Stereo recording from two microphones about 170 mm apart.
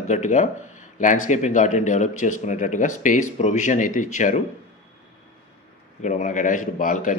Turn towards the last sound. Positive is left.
turn(degrees=50)  # may be behind; listen again after turning